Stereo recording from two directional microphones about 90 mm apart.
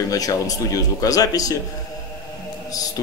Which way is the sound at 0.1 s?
40° left (ahead or behind).